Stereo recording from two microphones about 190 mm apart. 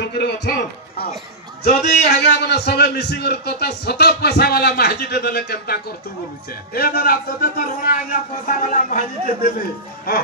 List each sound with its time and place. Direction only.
0.0 s a sound: 60° left (ahead or behind)
1.7 s a man's voice: 35° left (ahead or behind)
2.0 s a man's voice: 60° left (ahead or behind)